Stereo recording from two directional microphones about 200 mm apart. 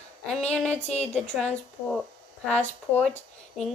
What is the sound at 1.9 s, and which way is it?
Speech, 5° left (ahead or behind).